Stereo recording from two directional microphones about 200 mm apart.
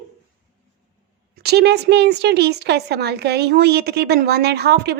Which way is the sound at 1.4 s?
55° right (ahead or behind).